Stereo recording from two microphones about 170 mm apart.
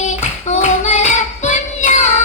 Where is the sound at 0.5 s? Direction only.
45° left (ahead or behind).